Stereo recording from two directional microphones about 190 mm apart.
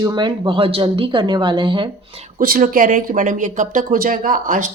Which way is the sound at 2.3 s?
45° right (ahead or behind).